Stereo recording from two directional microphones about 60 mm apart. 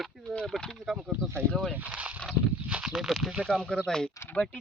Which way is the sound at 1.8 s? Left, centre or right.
Right.